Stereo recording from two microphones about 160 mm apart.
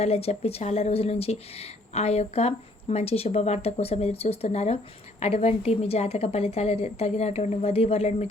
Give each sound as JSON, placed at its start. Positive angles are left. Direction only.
{"t": 0.0, "sound": "a woman's voice", "side_deg": 40}